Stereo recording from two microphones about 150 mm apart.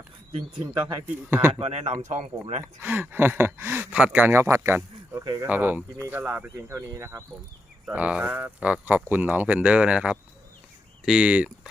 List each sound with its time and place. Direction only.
1.0 s speech: 15° right (ahead or behind)
1.5 s speech: 45° right (ahead or behind)
2.8 s speech: 15° right (ahead or behind)
5.5 s speech: 10° right (ahead or behind)